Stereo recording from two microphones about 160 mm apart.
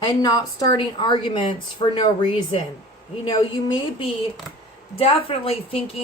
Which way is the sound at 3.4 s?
35° left (ahead or behind).